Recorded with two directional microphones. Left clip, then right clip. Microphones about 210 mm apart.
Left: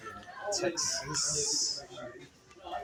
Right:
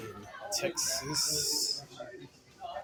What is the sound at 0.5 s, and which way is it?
Speech, 20° right (ahead or behind).